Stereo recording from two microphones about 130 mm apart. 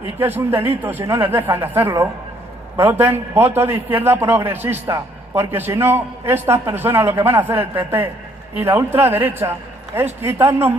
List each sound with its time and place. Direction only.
0.2 s a man's voice: 15° right (ahead or behind)